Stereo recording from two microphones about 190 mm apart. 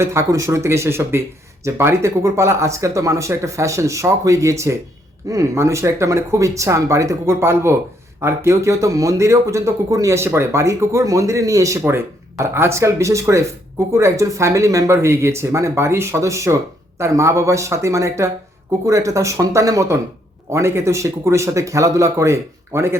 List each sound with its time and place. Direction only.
0.0 s speech: 15° right (ahead or behind)